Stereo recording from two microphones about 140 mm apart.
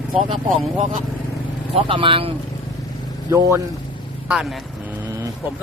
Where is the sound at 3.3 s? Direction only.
20° right (ahead or behind).